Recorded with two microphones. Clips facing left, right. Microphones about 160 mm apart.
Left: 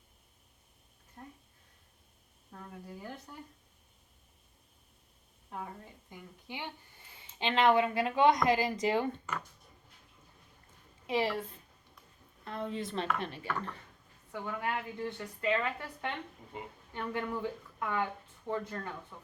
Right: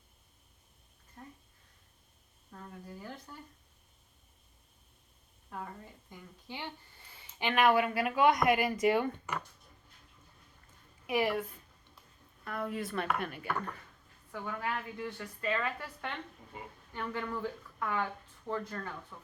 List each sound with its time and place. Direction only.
2.7 s speech: 5° left (ahead or behind)
3.0 s speech: 15° left (ahead or behind)
5.5 s speech: 15° left (ahead or behind)
11.0 s a sound: 25° left (ahead or behind)
11.3 s speech: 25° left (ahead or behind)